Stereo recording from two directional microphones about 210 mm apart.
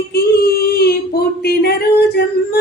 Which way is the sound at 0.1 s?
50° left (ahead or behind).